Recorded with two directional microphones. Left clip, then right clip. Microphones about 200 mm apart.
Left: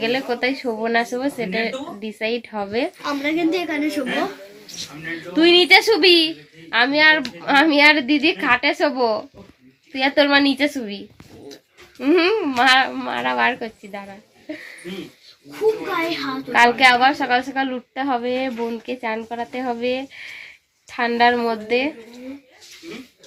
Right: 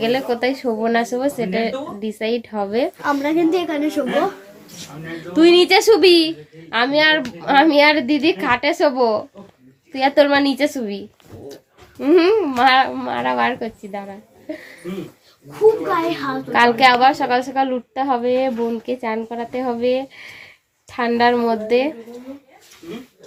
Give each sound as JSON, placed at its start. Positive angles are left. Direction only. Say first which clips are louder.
{"t": 0.0, "sound": "a woman's voice", "louder": "right 2 dB", "side_deg": -5}
{"t": 3.2, "sound": "a woman's voice", "louder": "right 1 dB", "side_deg": -20}
{"t": 5.1, "sound": "a woman's voice", "louder": "right 2 dB", "side_deg": 0}
{"t": 16.5, "sound": "a woman's voice", "louder": "right 1 dB", "side_deg": 0}